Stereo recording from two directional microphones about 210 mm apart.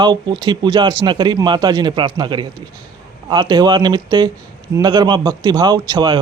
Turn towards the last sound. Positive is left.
turn(degrees=-20)  # may be behind; listen again after turning